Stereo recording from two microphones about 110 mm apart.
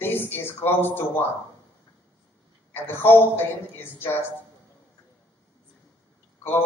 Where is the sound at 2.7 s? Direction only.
20° left (ahead or behind).